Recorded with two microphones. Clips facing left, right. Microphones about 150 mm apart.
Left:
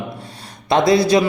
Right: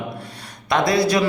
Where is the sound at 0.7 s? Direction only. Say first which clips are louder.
Left 4 dB; 25° left (ahead or behind).